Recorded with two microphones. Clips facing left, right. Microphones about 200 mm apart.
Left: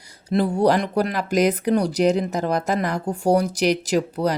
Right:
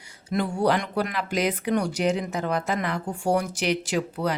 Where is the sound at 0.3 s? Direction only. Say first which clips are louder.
Left 5 dB; 35° left (ahead or behind).